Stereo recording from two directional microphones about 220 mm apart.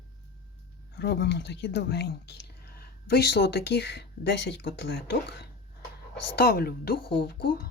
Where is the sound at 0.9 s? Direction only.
50° left (ahead or behind).